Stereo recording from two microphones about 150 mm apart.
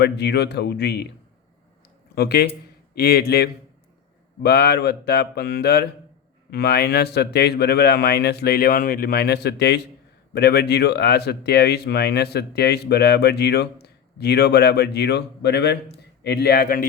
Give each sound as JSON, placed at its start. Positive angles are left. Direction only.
{"t": 0.0, "sound": "speech", "side_deg": 90}
{"t": 2.1, "sound": "speech", "side_deg": 90}